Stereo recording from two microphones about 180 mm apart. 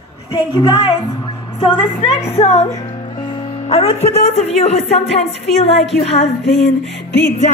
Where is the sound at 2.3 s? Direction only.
35° left (ahead or behind).